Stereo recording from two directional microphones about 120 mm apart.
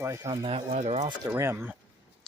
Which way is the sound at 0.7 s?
70° right (ahead or behind).